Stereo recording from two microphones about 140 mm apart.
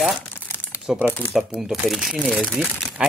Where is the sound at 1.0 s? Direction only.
15° left (ahead or behind).